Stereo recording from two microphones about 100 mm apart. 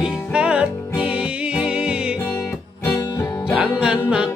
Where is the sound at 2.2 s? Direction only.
25° left (ahead or behind).